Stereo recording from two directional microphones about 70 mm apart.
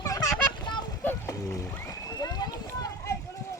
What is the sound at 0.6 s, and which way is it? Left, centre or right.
Vehicle, left.